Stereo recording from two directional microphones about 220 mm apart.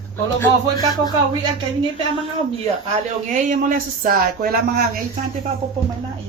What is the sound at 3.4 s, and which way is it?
Speech, 40° right (ahead or behind).